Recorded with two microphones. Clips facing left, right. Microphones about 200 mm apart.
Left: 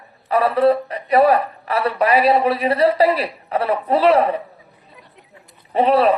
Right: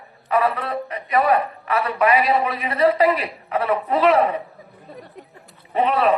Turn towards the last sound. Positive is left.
turn(degrees=35)  # may be behind; listen again after turning